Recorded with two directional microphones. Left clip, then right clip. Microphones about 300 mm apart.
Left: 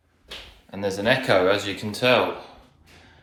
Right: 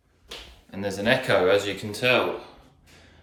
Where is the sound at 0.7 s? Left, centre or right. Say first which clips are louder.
Left 2 dB; centre.